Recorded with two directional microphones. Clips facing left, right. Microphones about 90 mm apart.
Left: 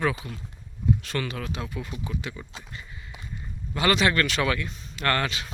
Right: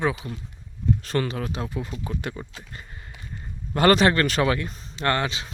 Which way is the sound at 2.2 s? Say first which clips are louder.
Right 4 dB; 55° right (ahead or behind).